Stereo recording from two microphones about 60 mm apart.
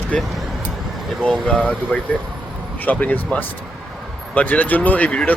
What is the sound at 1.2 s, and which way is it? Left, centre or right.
Speech, centre.